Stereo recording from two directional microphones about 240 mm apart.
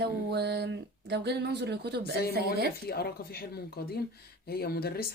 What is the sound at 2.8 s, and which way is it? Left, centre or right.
Speech, left.